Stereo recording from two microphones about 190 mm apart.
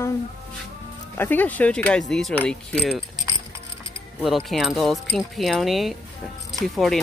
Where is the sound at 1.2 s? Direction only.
10° left (ahead or behind).